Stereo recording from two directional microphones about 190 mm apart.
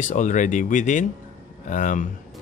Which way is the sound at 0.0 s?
40° left (ahead or behind).